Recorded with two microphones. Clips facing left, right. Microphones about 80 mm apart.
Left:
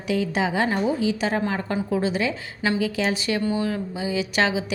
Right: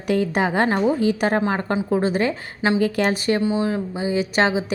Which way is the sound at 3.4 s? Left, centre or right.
Right.